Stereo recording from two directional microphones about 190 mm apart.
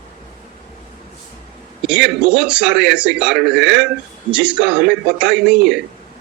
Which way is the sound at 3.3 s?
65° right (ahead or behind).